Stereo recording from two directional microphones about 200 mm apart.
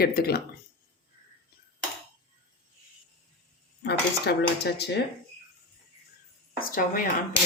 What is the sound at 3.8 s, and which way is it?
Cutlery, 55° left (ahead or behind).